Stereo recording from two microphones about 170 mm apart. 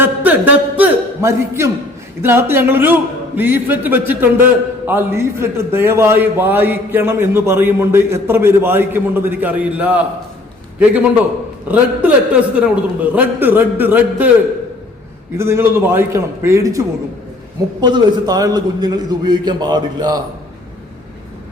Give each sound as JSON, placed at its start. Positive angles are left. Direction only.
{"t": 0.0, "sound": "a sound", "side_deg": -10}
{"t": 2.2, "sound": "a man's voice", "side_deg": -15}
{"t": 11.7, "sound": "a man's voice", "side_deg": -10}
{"t": 15.4, "sound": "a man's voice", "side_deg": -15}